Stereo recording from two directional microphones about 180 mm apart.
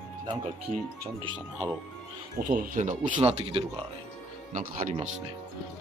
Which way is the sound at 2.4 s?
50° right (ahead or behind).